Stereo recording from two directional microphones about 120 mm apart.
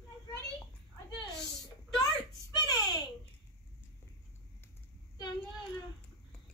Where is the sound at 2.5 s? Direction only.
35° left (ahead or behind).